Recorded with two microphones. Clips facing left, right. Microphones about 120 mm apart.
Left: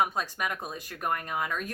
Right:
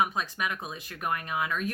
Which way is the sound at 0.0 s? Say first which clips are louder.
Even; 40° left (ahead or behind).